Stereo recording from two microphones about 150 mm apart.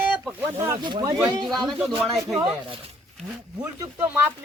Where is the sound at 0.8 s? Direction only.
30° right (ahead or behind).